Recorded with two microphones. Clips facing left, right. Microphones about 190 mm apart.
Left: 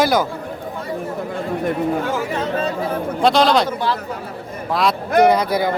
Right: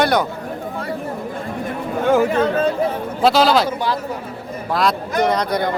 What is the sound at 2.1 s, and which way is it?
Speech, 55° right (ahead or behind).